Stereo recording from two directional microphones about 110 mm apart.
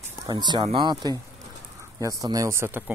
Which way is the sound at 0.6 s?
50° right (ahead or behind).